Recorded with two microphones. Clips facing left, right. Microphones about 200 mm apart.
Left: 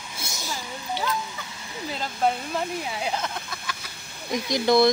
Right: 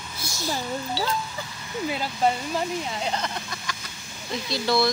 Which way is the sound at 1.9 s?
5° right (ahead or behind).